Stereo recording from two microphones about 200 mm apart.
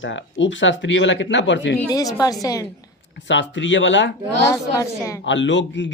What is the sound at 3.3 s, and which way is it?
Speech, 65° left (ahead or behind).